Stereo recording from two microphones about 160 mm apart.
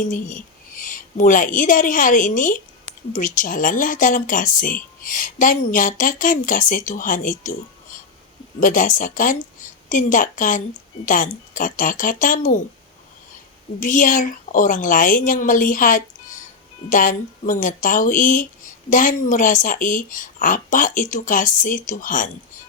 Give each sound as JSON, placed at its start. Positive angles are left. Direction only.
{"t": 0.1, "sound": "a woman's voice", "side_deg": 55}
{"t": 8.6, "sound": "speech", "side_deg": 55}
{"t": 13.7, "sound": "speech", "side_deg": 55}